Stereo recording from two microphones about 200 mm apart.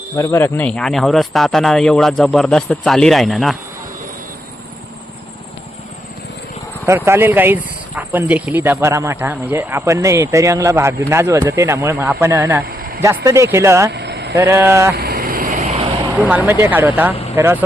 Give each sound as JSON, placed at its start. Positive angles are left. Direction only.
{"t": 0.2, "sound": "speech", "side_deg": 10}
{"t": 6.8, "sound": "speech", "side_deg": -10}
{"t": 12.6, "sound": "a sound", "side_deg": -50}
{"t": 13.0, "sound": "speech", "side_deg": -15}
{"t": 13.9, "sound": "vehicle", "side_deg": -55}
{"t": 14.3, "sound": "speech", "side_deg": -15}
{"t": 14.9, "sound": "vehicle", "side_deg": -50}
{"t": 15.5, "sound": "vehicle", "side_deg": -35}
{"t": 16.1, "sound": "speech", "side_deg": -5}